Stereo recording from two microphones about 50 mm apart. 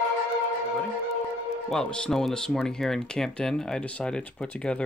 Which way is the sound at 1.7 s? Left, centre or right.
Centre.